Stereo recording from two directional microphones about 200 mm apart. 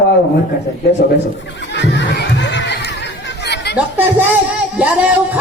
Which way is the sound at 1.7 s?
60° left (ahead or behind).